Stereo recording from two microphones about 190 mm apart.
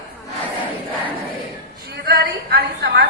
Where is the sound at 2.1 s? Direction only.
55° right (ahead or behind).